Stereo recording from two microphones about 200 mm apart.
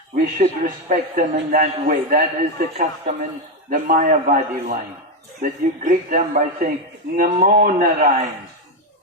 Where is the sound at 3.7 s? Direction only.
40° right (ahead or behind).